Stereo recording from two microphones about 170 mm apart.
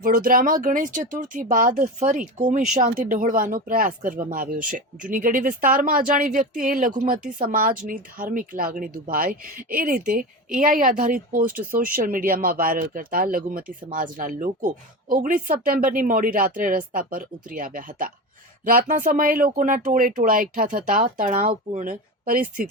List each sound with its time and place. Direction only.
0.0 s speech: 55° right (ahead or behind)